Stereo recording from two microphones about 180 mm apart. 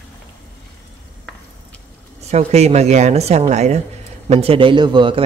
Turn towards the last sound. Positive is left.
turn(degrees=-25)  # may be behind; listen again after turning